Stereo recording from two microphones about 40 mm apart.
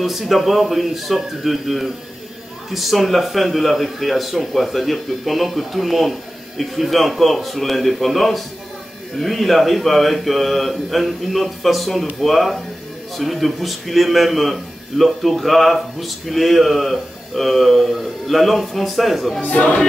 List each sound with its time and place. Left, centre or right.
0.0 s a man's voice: centre
19.5 s music: left